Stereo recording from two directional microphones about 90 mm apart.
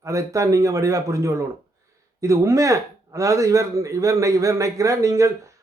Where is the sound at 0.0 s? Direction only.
35° right (ahead or behind).